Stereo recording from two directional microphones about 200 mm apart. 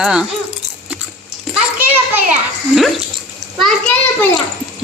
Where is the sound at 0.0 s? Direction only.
5° right (ahead or behind).